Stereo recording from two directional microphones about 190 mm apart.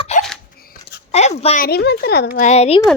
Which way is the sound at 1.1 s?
35° left (ahead or behind).